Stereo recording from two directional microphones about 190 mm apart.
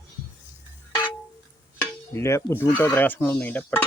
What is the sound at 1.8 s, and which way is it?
Speech, 15° left (ahead or behind).